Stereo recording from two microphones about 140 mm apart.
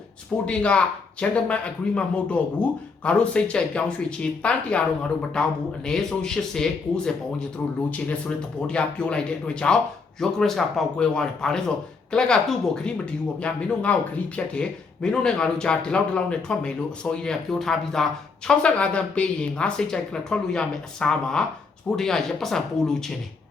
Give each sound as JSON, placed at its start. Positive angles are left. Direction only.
{"t": 0.4, "sound": "speech", "side_deg": 5}
{"t": 8.6, "sound": "speech", "side_deg": 5}